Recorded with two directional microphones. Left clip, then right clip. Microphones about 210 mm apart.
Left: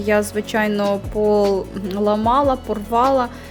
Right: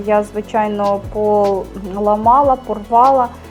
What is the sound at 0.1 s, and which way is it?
Speech, 50° left (ahead or behind).